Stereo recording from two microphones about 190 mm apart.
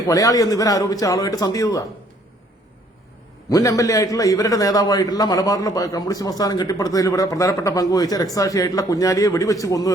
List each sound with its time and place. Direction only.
0.1 s a man's voice: 15° left (ahead or behind)
3.5 s a man's voice: 15° left (ahead or behind)